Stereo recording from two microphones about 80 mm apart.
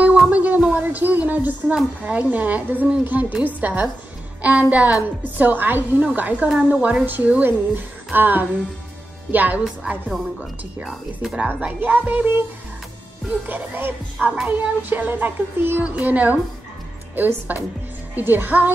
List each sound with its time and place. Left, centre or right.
0.3 s music: centre
2.0 s a woman's voice: centre
11.3 s speech: right
13.5 s speech: right